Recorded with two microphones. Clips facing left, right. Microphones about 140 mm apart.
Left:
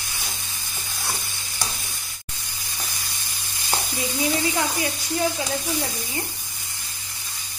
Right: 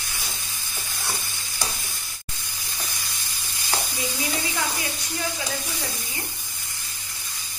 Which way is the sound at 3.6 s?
20° left (ahead or behind).